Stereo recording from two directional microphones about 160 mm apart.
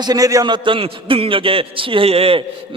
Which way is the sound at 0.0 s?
25° right (ahead or behind).